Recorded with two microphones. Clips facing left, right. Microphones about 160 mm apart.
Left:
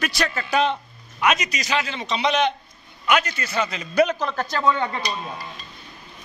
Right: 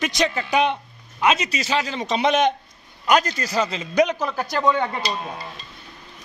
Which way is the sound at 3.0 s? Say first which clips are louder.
Right 3 dB; 35° right (ahead or behind).